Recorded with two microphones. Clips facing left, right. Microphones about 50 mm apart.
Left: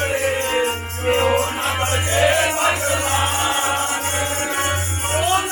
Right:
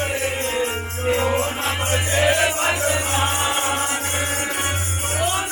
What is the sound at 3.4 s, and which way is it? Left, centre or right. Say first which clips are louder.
Music: left 2 dB; left.